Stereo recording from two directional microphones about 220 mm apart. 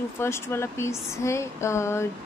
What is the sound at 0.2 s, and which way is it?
A woman's voice, 10° left (ahead or behind).